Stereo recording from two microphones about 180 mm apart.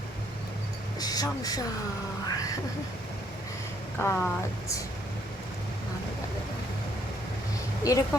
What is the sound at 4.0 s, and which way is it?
Speech, 15° left (ahead or behind).